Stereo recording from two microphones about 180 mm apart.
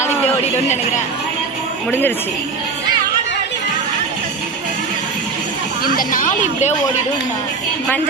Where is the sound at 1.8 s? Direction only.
10° left (ahead or behind).